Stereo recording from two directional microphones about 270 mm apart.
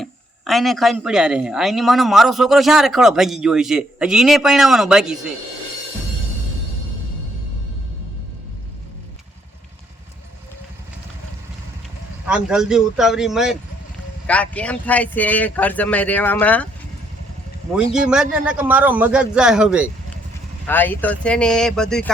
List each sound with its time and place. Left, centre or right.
0.0 s speech: centre
12.5 s speech: centre
17.7 s speech: centre